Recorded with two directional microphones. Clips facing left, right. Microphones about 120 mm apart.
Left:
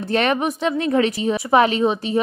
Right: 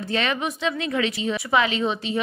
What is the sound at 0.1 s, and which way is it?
A woman's voice, 50° left (ahead or behind).